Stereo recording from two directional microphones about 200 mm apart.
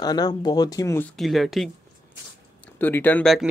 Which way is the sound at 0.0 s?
20° left (ahead or behind).